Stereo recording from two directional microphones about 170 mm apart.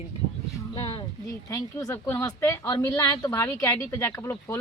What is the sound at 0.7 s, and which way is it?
Speech, 30° left (ahead or behind).